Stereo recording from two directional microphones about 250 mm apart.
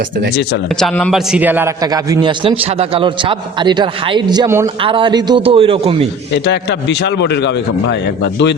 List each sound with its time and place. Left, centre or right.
0.8 s a man's voice: centre; by 6.1 s right
6.3 s a man's voice: left